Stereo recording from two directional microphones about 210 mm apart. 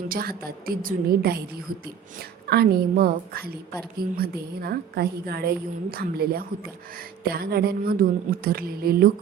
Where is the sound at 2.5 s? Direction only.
45° right (ahead or behind).